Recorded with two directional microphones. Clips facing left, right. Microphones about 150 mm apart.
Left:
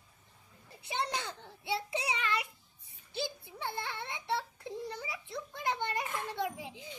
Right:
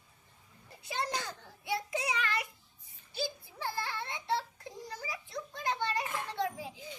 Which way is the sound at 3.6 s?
20° left (ahead or behind).